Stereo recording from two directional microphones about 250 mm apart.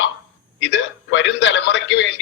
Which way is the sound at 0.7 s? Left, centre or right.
Left.